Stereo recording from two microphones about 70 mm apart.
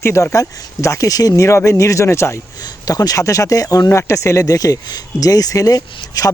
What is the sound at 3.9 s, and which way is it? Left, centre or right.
Speech, left.